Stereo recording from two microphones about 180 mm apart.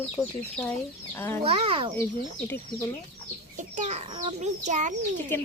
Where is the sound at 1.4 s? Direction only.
30° right (ahead or behind).